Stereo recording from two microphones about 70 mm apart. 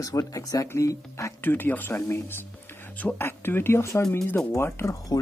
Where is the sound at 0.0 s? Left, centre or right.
Left.